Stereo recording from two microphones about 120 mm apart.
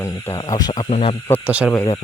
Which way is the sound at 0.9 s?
55° left (ahead or behind).